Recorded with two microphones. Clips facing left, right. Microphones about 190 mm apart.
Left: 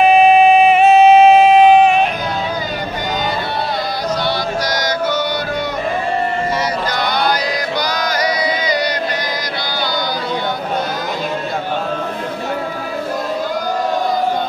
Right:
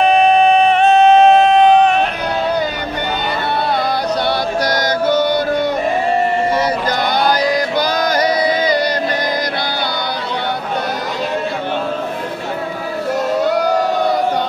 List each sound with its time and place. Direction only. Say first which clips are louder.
0.0 s music: left 2 dB; 5° left (ahead or behind)
4.6 s music: right 5 dB; 50° right (ahead or behind)